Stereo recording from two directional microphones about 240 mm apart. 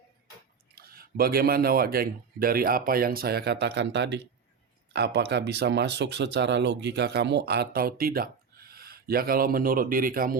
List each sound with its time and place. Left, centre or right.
0.8 s speech: right